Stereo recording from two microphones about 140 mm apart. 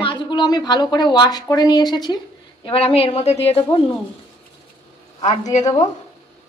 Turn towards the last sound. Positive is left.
turn(degrees=55)  # may be behind; listen again after turning